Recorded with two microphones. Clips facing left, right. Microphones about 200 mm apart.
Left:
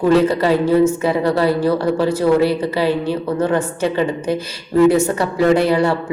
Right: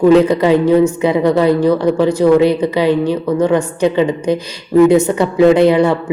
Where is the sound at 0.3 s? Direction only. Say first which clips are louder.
Right 4 dB; 15° right (ahead or behind).